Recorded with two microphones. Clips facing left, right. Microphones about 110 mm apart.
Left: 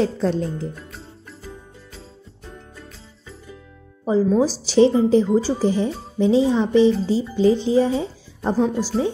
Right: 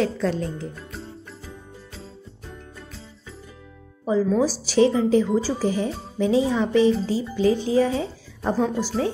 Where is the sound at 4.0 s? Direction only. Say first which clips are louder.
Left 3 dB; 25° left (ahead or behind).